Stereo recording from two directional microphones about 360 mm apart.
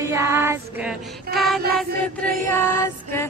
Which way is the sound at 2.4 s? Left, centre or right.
Centre.